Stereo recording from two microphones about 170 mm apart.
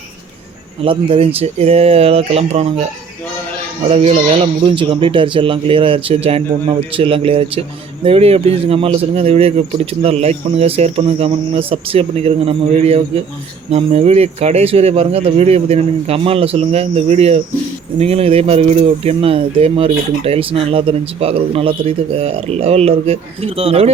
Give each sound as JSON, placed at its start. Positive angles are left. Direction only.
{"t": 0.8, "sound": "speech", "side_deg": -30}
{"t": 3.8, "sound": "speech", "side_deg": -35}